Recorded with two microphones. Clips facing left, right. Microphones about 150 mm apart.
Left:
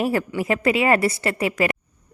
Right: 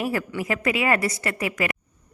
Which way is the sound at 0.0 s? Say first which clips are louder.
Left 4 dB; 25° left (ahead or behind).